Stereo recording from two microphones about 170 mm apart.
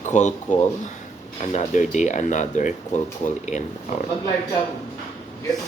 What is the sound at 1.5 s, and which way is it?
Speech, 45° left (ahead or behind).